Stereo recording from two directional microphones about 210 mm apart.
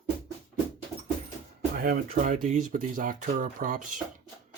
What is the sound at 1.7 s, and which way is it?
Speech, 45° right (ahead or behind).